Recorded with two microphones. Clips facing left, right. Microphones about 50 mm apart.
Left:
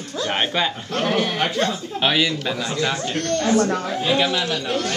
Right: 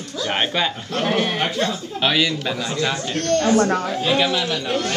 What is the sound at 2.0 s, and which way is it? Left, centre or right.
Speech, centre.